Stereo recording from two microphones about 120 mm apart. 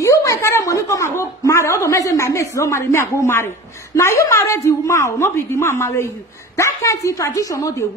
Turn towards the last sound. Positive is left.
turn(degrees=30)  # may be behind; listen again after turning